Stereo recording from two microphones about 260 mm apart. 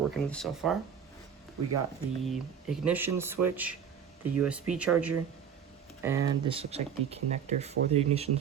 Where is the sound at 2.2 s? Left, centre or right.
Centre.